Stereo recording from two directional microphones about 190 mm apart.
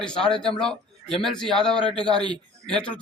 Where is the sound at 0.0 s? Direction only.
5° left (ahead or behind).